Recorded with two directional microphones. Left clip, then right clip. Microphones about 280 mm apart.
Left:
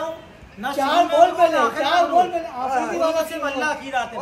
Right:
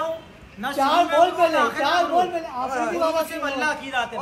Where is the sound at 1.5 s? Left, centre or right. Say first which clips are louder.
Left 2 dB; centre.